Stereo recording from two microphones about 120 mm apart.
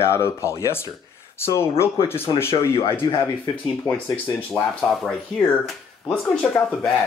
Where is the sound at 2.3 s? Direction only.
40° left (ahead or behind).